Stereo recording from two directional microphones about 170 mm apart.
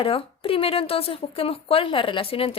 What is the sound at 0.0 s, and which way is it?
A woman's voice, 30° left (ahead or behind).